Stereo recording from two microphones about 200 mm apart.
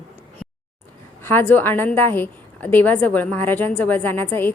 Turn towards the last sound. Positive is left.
turn(degrees=10)  # may be behind; listen again after turning